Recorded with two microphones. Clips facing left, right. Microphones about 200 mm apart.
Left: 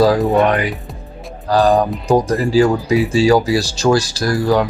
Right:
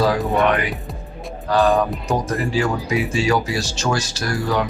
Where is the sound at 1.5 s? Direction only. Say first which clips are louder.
Left 3 dB; 35° left (ahead or behind).